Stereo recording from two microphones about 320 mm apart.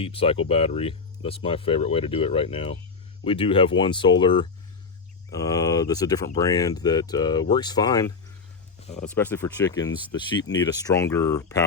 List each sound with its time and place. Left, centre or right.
0.0 s speech: centre